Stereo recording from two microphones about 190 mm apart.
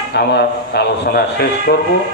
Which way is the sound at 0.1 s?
60° left (ahead or behind).